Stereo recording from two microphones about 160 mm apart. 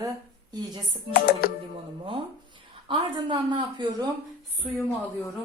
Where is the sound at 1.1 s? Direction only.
70° left (ahead or behind).